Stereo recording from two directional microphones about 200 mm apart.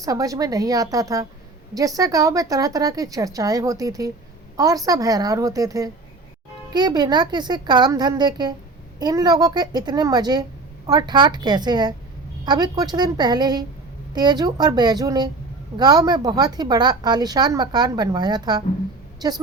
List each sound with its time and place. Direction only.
0.0 s a woman's voice: 15° right (ahead or behind)